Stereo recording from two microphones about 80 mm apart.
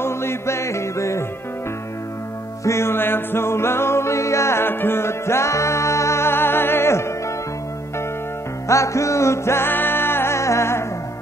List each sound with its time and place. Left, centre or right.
0.0 s music: left
2.6 s music: left
8.6 s music: left